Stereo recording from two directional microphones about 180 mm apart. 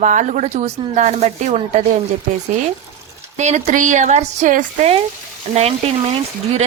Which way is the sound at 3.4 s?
40° right (ahead or behind).